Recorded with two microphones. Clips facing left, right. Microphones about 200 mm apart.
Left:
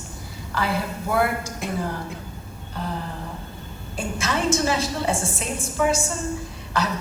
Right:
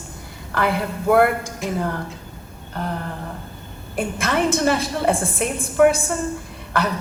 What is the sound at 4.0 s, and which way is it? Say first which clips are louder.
A woman's voice: right 4 dB; 55° right (ahead or behind).